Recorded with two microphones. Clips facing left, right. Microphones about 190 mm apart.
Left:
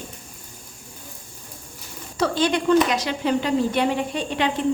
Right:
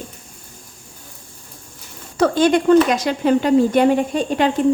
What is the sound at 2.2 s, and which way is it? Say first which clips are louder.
A woman's voice: right 6 dB; 50° right (ahead or behind).